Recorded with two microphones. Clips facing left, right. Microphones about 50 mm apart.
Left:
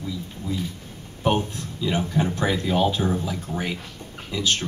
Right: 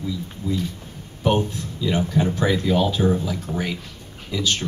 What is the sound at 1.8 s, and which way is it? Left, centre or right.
A man's voice, centre.